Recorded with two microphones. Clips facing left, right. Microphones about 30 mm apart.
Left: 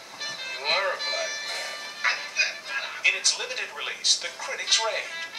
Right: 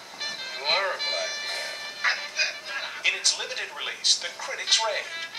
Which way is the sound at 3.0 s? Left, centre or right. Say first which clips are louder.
Left 1 dB; centre.